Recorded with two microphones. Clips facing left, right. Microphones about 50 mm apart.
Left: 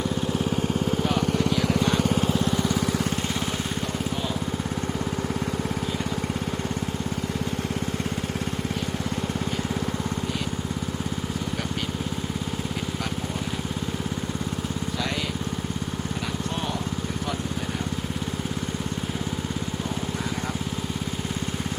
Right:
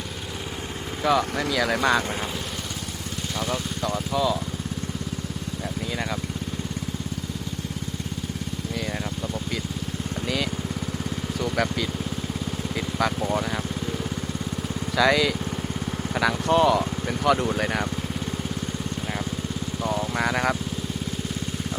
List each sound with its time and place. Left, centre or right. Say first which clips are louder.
16.2 s vehicle: right 14 dB; right
20.1 s vehicle: right 6 dB; right